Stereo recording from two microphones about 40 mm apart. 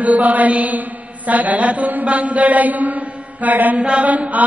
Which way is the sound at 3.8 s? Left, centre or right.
Right.